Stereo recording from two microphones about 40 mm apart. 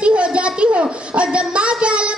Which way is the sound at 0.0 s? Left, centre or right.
Right.